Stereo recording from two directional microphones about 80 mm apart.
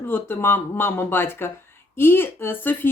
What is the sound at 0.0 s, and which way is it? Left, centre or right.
Speech, left.